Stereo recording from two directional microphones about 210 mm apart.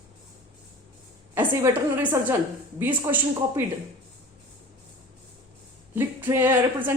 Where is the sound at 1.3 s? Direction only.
20° right (ahead or behind).